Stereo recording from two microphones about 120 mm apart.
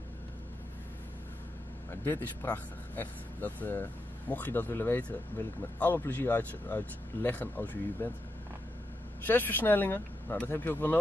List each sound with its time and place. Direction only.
1.9 s speech: 15° left (ahead or behind)
9.2 s speech: 15° left (ahead or behind)